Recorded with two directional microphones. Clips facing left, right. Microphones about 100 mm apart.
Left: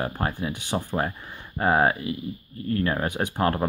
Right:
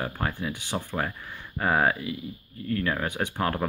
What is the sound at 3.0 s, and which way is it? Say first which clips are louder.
Speech: left 2 dB; 15° left (ahead or behind).